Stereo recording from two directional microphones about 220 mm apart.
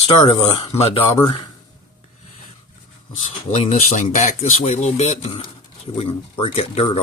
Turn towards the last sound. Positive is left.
turn(degrees=25)  # may be behind; listen again after turning